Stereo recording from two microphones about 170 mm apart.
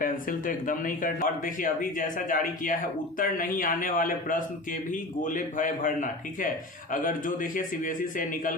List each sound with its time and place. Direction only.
0.0 s speech: 55° left (ahead or behind)